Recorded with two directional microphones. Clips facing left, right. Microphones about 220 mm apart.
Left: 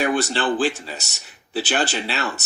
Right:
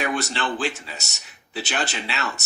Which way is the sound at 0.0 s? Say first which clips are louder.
Left 5 dB; 30° left (ahead or behind).